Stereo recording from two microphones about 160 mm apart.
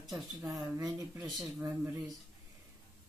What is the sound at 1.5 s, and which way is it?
Speech, 15° right (ahead or behind).